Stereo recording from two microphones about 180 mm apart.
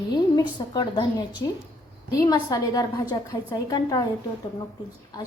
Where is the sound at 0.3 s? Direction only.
25° left (ahead or behind).